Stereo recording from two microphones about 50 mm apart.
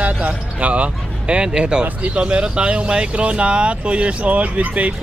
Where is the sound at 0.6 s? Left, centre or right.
Right.